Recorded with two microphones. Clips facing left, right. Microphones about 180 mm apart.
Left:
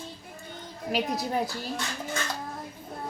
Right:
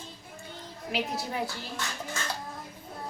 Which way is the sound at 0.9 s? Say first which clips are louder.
Left 4 dB; 40° left (ahead or behind).